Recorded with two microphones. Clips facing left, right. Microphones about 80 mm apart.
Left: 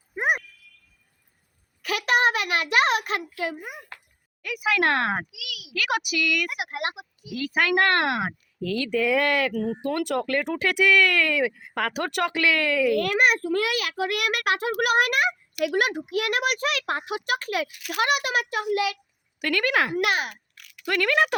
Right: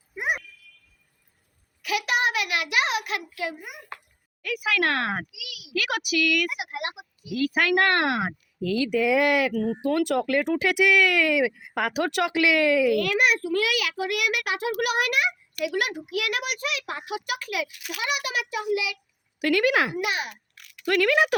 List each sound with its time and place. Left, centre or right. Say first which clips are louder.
0.1 s a sound: left 3 dB; left
1.8 s a sound: left 3 dB; left
4.4 s speech: left 2 dB; centre
6.5 s a sound: left 2 dB; left
7.3 s speech: right 1 dB; centre
9.5 s speech: right 2 dB; centre
13.0 s a child's voice: left 1 dB; left
13.9 s a child's voice: even; left
17.1 s a child's voice: left 3 dB; left
17.8 s a child's voice: left 5 dB; left
19.4 s speech: right 2 dB; centre
20.0 s speech: left 4 dB; left
20.9 s speech: right 1 dB; centre